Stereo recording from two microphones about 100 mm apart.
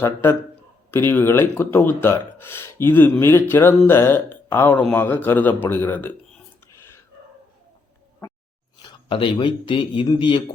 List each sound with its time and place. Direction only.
0.0 s speech: 25° left (ahead or behind)
6.7 s a sound: 25° left (ahead or behind)
9.0 s speech: 60° left (ahead or behind)